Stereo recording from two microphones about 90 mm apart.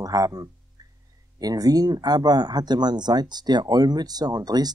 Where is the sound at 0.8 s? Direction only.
45° right (ahead or behind).